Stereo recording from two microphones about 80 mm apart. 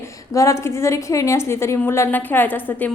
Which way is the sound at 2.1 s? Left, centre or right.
Left.